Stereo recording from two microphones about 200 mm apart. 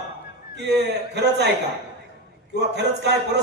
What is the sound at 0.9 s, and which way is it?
Speech, 55° right (ahead or behind).